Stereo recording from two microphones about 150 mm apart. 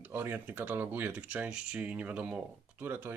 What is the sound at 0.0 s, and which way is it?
Speech, 15° right (ahead or behind).